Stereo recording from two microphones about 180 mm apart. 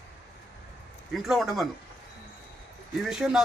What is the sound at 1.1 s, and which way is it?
Speech, centre (ahead or behind).